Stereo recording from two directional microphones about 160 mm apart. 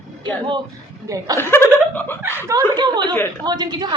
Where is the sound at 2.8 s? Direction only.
30° right (ahead or behind).